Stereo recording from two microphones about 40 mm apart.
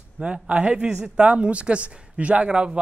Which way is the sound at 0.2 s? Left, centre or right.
Right.